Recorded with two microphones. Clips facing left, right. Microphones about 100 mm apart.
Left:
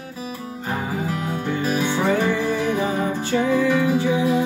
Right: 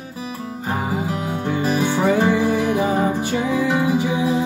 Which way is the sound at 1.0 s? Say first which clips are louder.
Right 1 dB; 15° right (ahead or behind).